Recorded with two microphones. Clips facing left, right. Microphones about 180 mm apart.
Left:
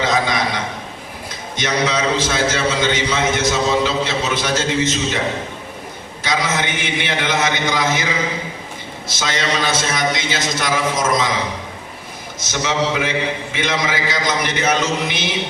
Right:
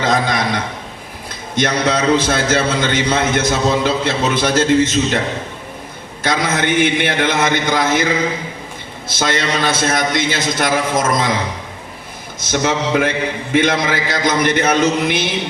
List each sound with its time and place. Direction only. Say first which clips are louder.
0.0 s a sound: right 2 dB; 50° right (ahead or behind)
1.5 s a man's voice: right 3 dB; 50° right (ahead or behind)
6.2 s a man's voice: right 3 dB; 55° right (ahead or behind)
12.4 s a man's voice: right 3 dB; 55° right (ahead or behind)